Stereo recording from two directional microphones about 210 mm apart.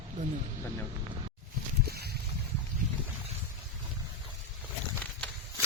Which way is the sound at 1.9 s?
50° right (ahead or behind).